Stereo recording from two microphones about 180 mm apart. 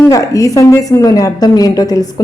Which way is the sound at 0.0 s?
20° left (ahead or behind).